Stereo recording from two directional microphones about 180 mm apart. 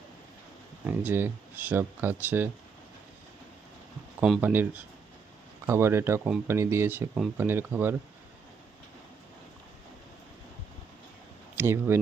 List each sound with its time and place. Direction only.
0.9 s speech: 10° right (ahead or behind)
4.2 s speech: 10° right (ahead or behind)
11.5 s speech: 15° right (ahead or behind)